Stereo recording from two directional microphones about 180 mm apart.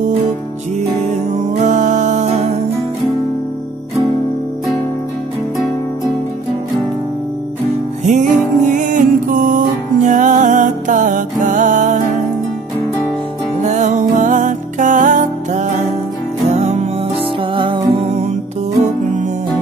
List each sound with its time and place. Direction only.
1.5 s music: 40° right (ahead or behind)
8.0 s music: 45° right (ahead or behind)
13.6 s music: 40° right (ahead or behind)